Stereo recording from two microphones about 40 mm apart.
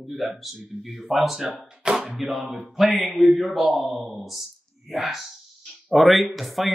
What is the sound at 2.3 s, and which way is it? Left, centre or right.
Speech, centre.